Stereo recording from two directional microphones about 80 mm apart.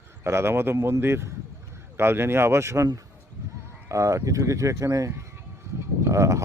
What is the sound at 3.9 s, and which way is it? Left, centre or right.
Speech, right.